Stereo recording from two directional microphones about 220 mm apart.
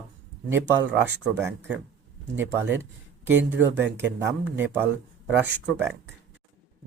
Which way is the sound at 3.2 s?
10° right (ahead or behind).